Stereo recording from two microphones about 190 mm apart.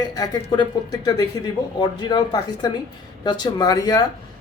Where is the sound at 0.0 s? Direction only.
20° left (ahead or behind).